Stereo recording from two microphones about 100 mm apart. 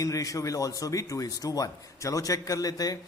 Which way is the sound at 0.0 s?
35° left (ahead or behind).